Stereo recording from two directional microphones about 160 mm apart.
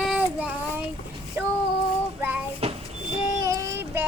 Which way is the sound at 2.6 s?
40° right (ahead or behind).